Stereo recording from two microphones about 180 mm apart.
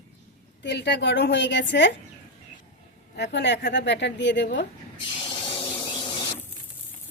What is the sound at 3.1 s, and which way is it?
Speech, 70° left (ahead or behind).